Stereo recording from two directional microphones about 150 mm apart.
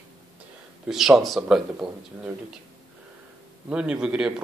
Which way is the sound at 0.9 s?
Centre (ahead or behind).